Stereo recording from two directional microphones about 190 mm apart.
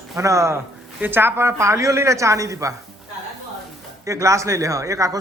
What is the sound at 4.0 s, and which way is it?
A woman's voice, 15° right (ahead or behind).